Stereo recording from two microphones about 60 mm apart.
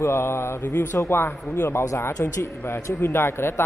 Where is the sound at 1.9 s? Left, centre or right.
Left.